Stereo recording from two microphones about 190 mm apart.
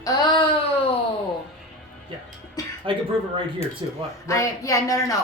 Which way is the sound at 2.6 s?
20° left (ahead or behind).